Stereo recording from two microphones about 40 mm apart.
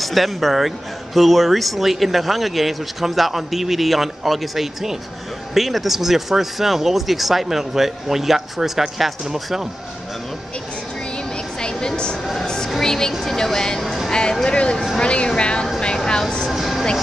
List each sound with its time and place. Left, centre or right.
0.0 s a man's voice: centre
11.6 s a sound: centre
12.7 s speech: centre
13.8 s music: centre
14.4 s speech: left
16.1 s train: centre
16.4 s vehicle: centre